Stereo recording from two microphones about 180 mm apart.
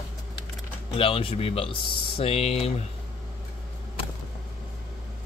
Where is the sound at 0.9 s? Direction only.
30° left (ahead or behind).